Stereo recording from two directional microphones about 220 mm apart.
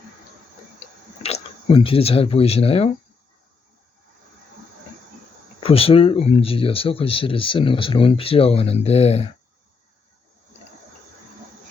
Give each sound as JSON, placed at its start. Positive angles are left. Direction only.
{"t": 1.2, "sound": "speech", "side_deg": 25}
{"t": 5.5, "sound": "speech", "side_deg": 25}